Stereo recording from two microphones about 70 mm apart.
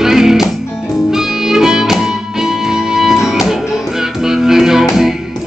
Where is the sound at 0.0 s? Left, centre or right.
Centre.